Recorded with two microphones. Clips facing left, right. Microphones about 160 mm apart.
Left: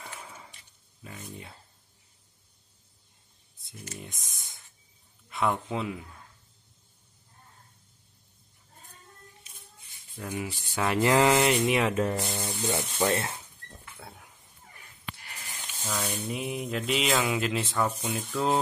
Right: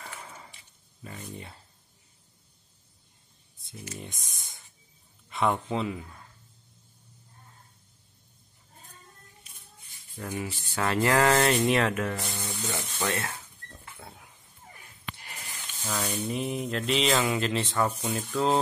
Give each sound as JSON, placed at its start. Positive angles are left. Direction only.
{"t": 0.0, "sound": "a sound", "side_deg": 5}
{"t": 1.0, "sound": "speech", "side_deg": 0}
{"t": 4.0, "sound": "speech", "side_deg": 0}
{"t": 10.1, "sound": "speech", "side_deg": 10}
{"t": 11.9, "sound": "speech", "side_deg": 30}
{"t": 13.9, "sound": "a sound", "side_deg": 0}
{"t": 15.9, "sound": "sizzle", "side_deg": -10}
{"t": 16.3, "sound": "speech", "side_deg": 5}